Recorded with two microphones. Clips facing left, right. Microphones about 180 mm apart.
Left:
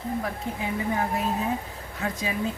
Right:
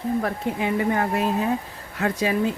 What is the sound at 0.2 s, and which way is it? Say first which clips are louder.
Speech: right 6 dB; 65° right (ahead or behind).